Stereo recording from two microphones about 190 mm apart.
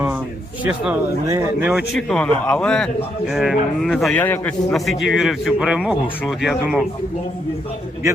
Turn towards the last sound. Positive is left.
turn(degrees=-5)  # may be behind; listen again after turning